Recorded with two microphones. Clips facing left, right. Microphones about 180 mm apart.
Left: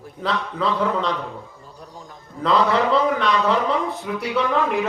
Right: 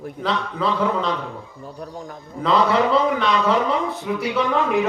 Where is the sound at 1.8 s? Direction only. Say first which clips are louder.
Right 7 dB; 65° right (ahead or behind).